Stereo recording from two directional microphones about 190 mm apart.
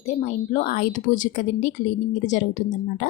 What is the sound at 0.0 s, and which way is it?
A woman's voice, 40° left (ahead or behind).